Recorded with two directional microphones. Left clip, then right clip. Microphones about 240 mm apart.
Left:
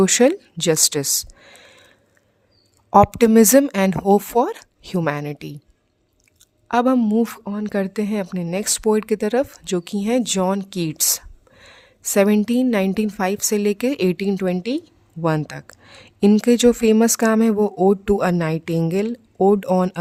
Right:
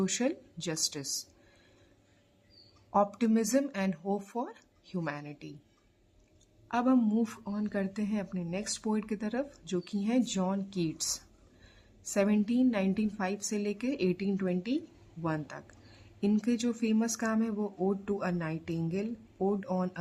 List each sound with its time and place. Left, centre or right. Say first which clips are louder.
0.0 s speech: left 17 dB; left
2.9 s speech: left 16 dB; left
6.7 s speech: left 11 dB; left